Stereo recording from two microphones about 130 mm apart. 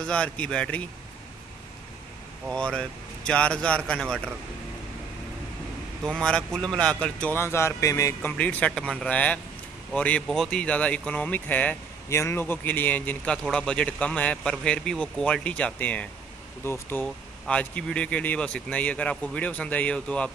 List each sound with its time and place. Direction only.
0.0 s speech: 10° left (ahead or behind)
2.5 s speech: 5° left (ahead or behind)
6.0 s speech: 5° left (ahead or behind)